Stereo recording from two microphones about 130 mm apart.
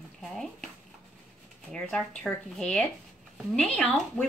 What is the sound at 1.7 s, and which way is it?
A woman's voice, 5° left (ahead or behind).